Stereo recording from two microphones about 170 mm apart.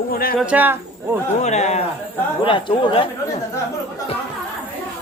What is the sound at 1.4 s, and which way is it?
Speech, 40° left (ahead or behind).